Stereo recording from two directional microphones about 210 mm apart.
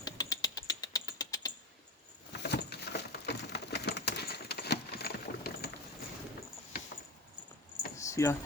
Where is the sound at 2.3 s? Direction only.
55° left (ahead or behind).